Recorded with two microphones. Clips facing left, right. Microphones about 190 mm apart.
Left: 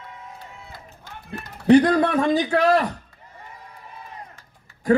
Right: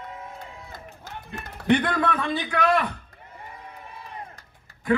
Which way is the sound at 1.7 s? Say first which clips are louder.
Left 7 dB; 35° left (ahead or behind).